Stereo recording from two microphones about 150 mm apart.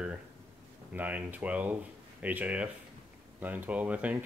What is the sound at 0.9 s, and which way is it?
Speech, 10° right (ahead or behind).